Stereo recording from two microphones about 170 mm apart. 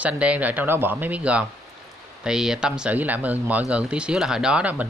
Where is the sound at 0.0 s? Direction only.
10° right (ahead or behind).